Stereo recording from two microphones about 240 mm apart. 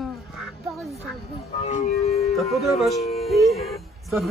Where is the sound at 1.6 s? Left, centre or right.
Left.